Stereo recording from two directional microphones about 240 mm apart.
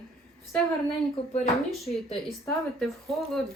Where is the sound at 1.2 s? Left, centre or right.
Left.